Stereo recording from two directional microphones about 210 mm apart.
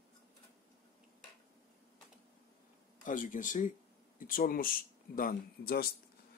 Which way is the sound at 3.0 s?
40° left (ahead or behind).